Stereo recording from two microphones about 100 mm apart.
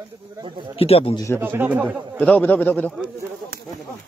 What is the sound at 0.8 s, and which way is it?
Speech, 75° left (ahead or behind).